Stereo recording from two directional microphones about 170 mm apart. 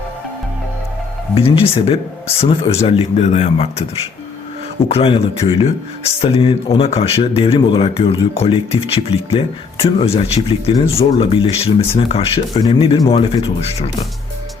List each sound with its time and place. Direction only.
1.4 s speech: 35° left (ahead or behind)
4.9 s speech: 35° left (ahead or behind)